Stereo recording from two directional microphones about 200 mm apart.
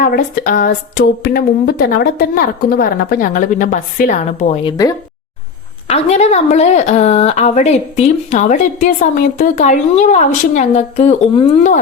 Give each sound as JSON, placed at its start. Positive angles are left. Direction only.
{"t": 0.0, "sound": "a woman's voice", "side_deg": 45}
{"t": 5.9, "sound": "speech", "side_deg": 35}